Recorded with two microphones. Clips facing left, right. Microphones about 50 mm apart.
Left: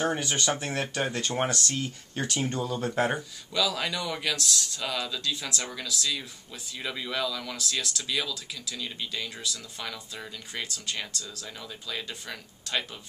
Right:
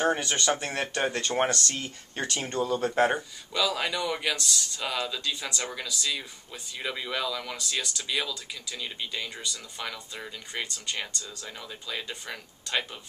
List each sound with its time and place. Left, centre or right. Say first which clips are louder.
0.2 s speech: right 1 dB; centre
2.7 s speech: right 5 dB; centre